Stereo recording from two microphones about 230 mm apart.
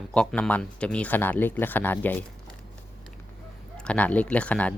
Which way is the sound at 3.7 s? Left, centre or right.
Centre.